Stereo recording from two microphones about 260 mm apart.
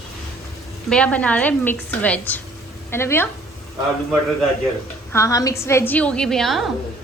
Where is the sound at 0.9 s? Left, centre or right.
Centre.